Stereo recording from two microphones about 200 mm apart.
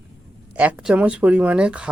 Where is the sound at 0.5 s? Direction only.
5° right (ahead or behind).